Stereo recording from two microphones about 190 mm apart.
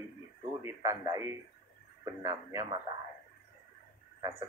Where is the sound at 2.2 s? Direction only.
20° right (ahead or behind).